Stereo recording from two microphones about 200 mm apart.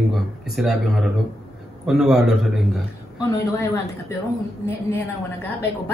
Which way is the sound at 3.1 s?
15° left (ahead or behind).